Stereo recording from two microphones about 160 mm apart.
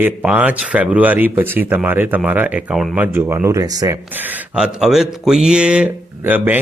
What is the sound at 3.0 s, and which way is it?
Speech, 15° right (ahead or behind).